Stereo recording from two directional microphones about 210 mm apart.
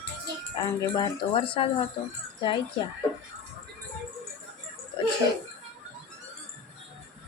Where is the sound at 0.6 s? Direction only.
20° left (ahead or behind).